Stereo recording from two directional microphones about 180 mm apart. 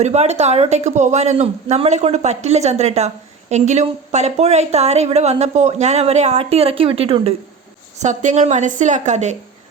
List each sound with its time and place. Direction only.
0.0 s a woman's voice: 40° right (ahead or behind)